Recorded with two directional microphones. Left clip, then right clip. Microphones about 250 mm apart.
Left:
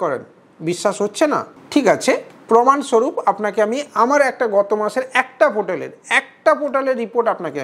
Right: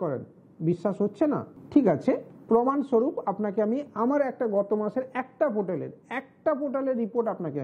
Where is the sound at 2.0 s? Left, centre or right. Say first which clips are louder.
Left 9 dB; centre.